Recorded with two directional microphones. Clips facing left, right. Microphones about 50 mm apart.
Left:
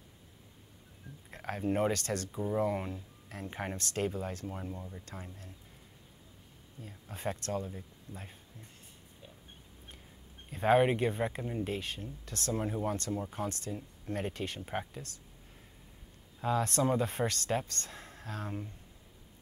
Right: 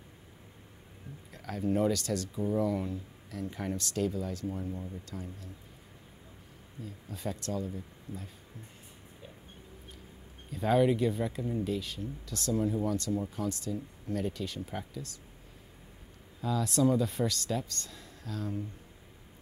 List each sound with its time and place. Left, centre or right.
1.3 s speech: left
5.0 s speech: left
6.8 s speech: left
10.5 s speech: left
16.3 s speech: left